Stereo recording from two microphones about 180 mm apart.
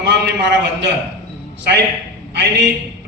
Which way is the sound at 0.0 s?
70° right (ahead or behind).